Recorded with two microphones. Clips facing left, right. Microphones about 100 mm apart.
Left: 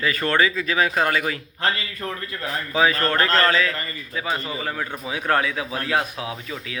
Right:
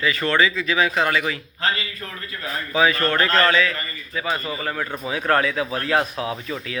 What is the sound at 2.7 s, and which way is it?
Speech, 35° left (ahead or behind).